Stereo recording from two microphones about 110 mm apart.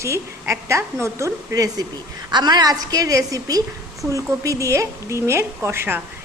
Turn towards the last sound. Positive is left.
turn(degrees=-20)  # may be behind; listen again after turning